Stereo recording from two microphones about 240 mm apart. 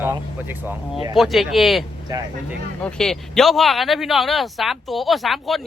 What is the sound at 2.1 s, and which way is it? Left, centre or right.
Speech, centre.